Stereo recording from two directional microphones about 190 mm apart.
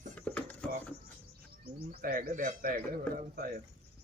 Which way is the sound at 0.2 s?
5° left (ahead or behind).